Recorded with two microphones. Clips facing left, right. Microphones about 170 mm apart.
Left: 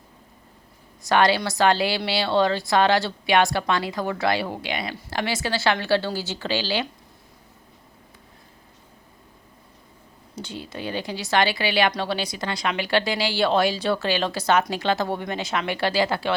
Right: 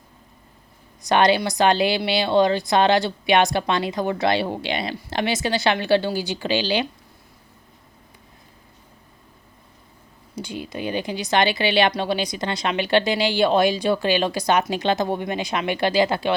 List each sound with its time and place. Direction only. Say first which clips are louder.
1.0 s a woman's voice: right 2 dB; 20° right (ahead or behind)
10.3 s a woman's voice: right 4 dB; 10° right (ahead or behind)